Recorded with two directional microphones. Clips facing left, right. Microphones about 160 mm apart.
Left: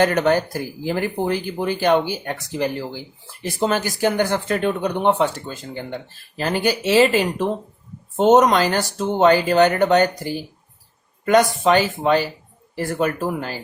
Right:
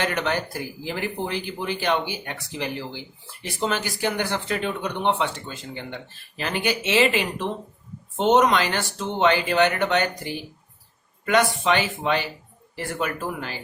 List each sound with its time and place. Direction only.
0.0 s speech: 45° left (ahead or behind)